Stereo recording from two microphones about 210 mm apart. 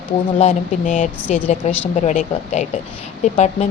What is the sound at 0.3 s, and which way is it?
Speech, 35° left (ahead or behind).